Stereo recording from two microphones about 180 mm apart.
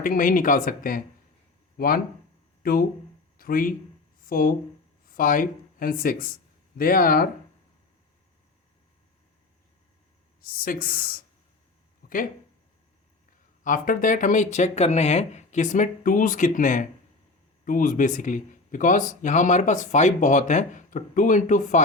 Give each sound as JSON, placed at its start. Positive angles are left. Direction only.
{"t": 0.0, "sound": "speech", "side_deg": 50}
{"t": 2.6, "sound": "speech", "side_deg": 55}
{"t": 10.4, "sound": "speech", "side_deg": 55}
{"t": 12.0, "sound": "a sound", "side_deg": 55}
{"t": 13.7, "sound": "speech", "side_deg": 50}